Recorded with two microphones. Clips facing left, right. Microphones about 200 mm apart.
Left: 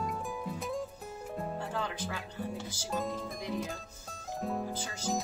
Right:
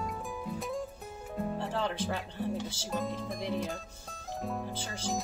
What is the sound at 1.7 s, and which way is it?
Music, 30° right (ahead or behind).